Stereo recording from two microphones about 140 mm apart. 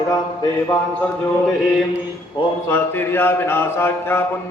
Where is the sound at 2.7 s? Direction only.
15° left (ahead or behind).